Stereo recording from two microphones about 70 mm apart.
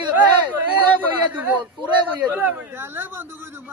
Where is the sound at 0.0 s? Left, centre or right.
Right.